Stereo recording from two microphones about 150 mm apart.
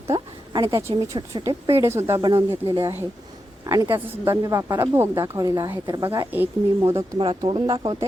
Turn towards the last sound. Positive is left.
turn(degrees=-30)  # may be behind; listen again after turning